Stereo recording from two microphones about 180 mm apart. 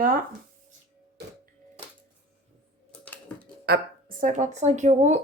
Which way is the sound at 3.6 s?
65° right (ahead or behind).